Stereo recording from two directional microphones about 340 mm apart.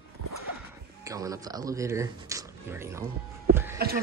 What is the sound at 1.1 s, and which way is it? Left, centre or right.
Speech, centre.